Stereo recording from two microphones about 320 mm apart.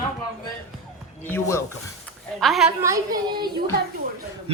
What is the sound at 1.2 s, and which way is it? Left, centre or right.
A man's voice, centre.